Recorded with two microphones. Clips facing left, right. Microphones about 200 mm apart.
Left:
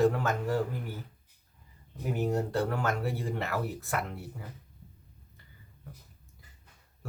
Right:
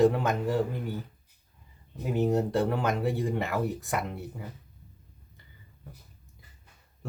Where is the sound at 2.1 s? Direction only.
20° right (ahead or behind).